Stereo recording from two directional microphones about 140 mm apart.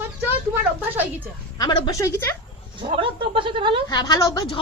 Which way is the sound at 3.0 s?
40° right (ahead or behind).